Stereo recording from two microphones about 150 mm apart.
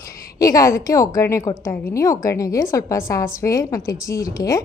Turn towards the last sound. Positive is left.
turn(degrees=25)  # may be behind; listen again after turning